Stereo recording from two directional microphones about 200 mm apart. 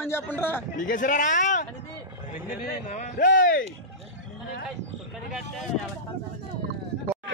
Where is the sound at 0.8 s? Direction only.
40° left (ahead or behind).